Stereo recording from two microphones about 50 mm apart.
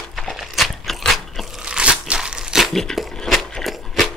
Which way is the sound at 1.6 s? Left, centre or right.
Right.